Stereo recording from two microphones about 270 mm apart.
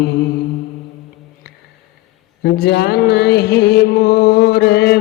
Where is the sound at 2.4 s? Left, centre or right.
Left.